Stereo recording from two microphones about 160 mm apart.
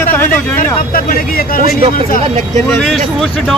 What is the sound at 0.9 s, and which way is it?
Speech, 60° left (ahead or behind).